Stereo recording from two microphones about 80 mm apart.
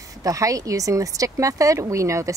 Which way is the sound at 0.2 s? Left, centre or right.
Right.